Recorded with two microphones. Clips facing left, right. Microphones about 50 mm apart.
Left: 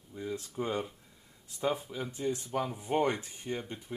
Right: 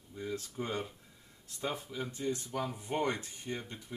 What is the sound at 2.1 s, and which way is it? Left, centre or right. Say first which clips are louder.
Speech: left 4 dB; left.